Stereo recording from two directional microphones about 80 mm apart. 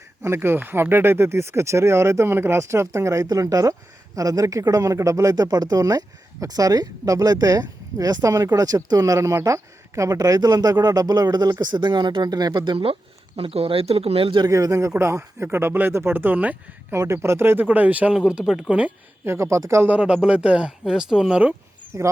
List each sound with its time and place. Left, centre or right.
0.2 s speech: right
11.6 s speech: right
14.2 s speech: right
14.4 s speech: right
16.9 s speech: right; by 18.1 s centre
18.3 s speech: centre
19.2 s speech: right
19.9 s speech: centre
21.9 s speech: right